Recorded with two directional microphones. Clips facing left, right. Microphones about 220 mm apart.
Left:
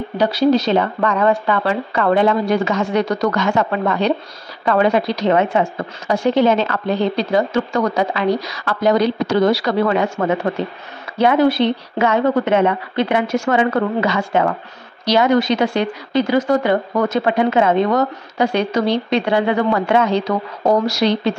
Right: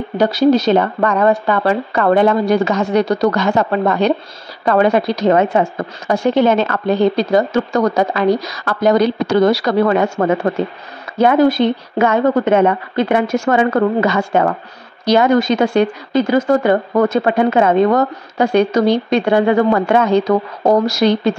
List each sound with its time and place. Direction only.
0.2 s speech: 45° right (ahead or behind)